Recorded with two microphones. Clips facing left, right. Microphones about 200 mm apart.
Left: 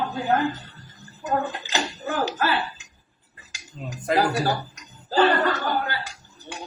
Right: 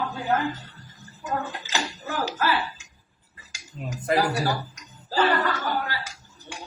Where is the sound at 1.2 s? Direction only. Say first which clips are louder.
Left 4 dB; 35° left (ahead or behind).